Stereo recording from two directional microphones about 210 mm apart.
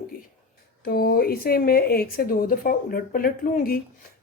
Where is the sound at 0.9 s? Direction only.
45° left (ahead or behind).